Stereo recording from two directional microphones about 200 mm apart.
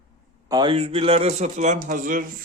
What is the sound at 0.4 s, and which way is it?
A man's voice, 20° right (ahead or behind).